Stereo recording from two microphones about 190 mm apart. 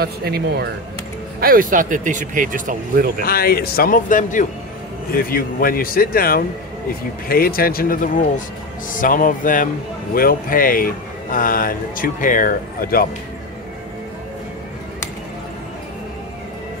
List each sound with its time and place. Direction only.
0.0 s speech: 55° right (ahead or behind)
3.2 s speech: 50° left (ahead or behind)